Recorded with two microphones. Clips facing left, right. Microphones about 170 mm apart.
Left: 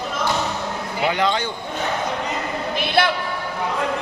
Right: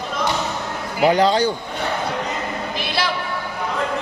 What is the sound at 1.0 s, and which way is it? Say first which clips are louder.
Speech: right 6 dB; 35° right (ahead or behind).